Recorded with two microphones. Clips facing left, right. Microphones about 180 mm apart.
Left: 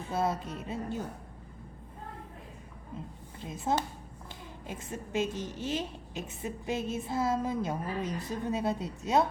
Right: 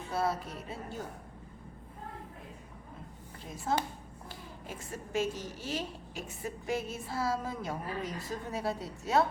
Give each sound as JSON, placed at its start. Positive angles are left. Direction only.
{"t": 0.1, "sound": "a woman's voice", "side_deg": 20}
{"t": 3.4, "sound": "a woman's voice", "side_deg": 20}